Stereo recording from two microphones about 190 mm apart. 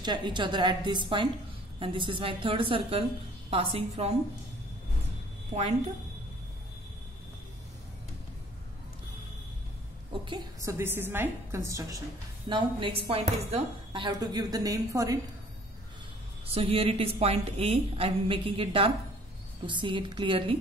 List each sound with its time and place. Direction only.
0.0 s speech: 25° right (ahead or behind)
5.5 s a woman's voice: 35° right (ahead or behind)
10.2 s a woman's voice: 20° right (ahead or behind)
16.4 s a woman's voice: 30° right (ahead or behind)